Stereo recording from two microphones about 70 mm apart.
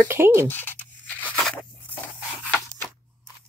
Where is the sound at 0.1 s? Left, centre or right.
Right.